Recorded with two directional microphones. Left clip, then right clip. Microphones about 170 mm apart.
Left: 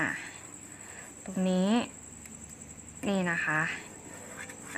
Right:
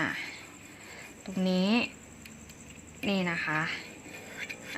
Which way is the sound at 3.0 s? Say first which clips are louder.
Left 1 dB; centre (ahead or behind).